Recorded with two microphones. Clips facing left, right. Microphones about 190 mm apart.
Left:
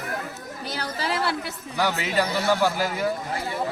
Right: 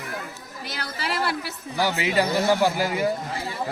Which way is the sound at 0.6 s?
35° left (ahead or behind).